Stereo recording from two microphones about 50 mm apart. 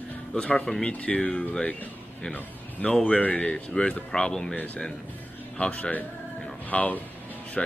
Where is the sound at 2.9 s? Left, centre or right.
Centre.